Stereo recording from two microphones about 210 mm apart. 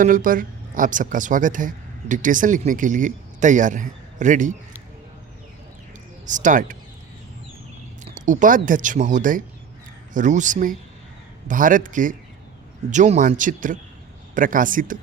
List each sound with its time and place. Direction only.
0.0 s speech: 40° right (ahead or behind)
6.2 s speech: 35° right (ahead or behind)
8.0 s speech: 35° right (ahead or behind)